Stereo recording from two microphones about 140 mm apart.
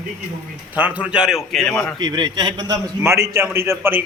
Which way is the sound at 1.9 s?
30° right (ahead or behind).